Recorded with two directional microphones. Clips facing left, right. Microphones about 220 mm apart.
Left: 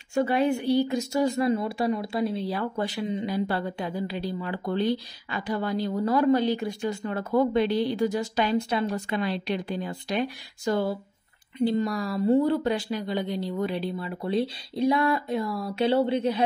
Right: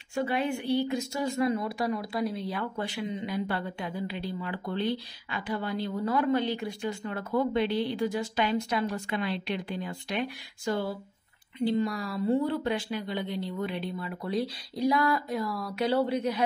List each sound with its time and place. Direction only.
0.1 s speech: 40° left (ahead or behind)
9.1 s a woman's voice: 40° left (ahead or behind)